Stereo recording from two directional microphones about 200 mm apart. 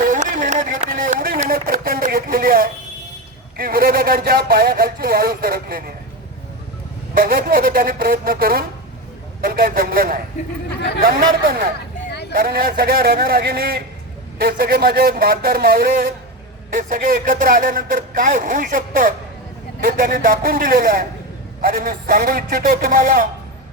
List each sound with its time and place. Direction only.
0.1 s a sound: 40° right (ahead or behind)
3.6 s speech: 45° right (ahead or behind)
7.1 s speech: 45° right (ahead or behind)
10.8 s speech: 55° left (ahead or behind)
11.0 s speech: 50° right (ahead or behind)